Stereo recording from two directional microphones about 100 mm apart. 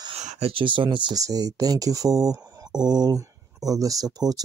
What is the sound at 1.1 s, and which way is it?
Speech, 40° right (ahead or behind).